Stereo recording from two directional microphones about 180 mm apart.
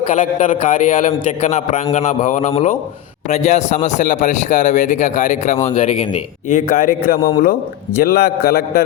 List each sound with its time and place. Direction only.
0.0 s a man's voice: 40° left (ahead or behind); by 8.8 s 60° left (ahead or behind)